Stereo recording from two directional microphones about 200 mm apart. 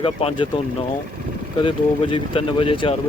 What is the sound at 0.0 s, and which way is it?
Speech, 25° left (ahead or behind).